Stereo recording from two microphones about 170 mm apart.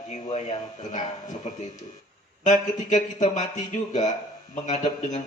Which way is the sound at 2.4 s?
45° left (ahead or behind).